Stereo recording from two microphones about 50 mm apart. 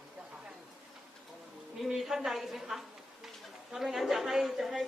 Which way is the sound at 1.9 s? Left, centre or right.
Centre.